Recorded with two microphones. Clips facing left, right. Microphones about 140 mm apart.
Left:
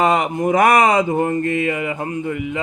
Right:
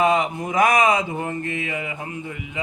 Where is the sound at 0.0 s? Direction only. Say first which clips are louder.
Left 2 dB; 60° left (ahead or behind).